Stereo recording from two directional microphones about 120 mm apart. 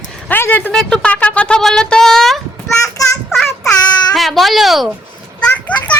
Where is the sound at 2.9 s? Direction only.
25° left (ahead or behind).